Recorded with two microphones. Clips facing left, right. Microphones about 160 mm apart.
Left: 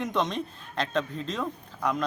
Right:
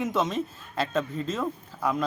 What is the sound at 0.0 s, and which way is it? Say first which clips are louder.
Speech: right 2 dB; 5° right (ahead or behind).